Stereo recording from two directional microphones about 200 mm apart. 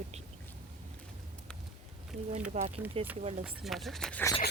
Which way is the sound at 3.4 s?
5° right (ahead or behind).